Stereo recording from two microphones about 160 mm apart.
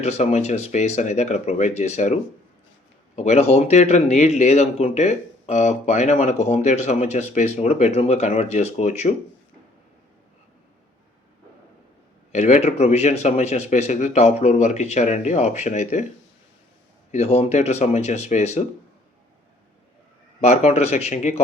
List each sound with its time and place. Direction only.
0.0 s speech: 45° left (ahead or behind)
3.2 s speech: 45° left (ahead or behind)
12.3 s speech: 45° left (ahead or behind)
17.1 s speech: 45° left (ahead or behind)
20.4 s speech: 45° left (ahead or behind)